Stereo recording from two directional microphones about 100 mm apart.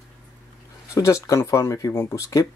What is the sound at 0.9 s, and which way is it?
Speech, 35° left (ahead or behind).